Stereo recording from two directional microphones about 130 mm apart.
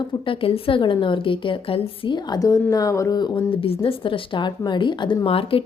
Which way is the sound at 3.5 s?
45° left (ahead or behind).